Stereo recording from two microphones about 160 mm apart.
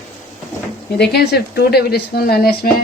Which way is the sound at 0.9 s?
90° left.